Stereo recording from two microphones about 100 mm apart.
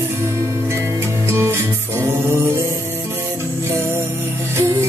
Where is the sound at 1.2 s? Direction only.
25° right (ahead or behind).